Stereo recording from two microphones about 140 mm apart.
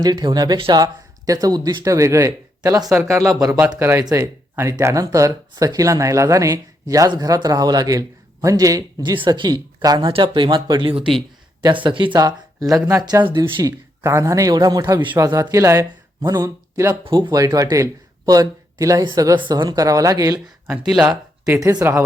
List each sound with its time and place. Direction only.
0.0 s speech: 30° right (ahead or behind)
17.0 s speech: 35° right (ahead or behind)